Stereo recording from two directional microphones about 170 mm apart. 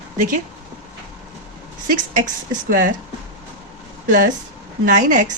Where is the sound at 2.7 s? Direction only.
55° right (ahead or behind).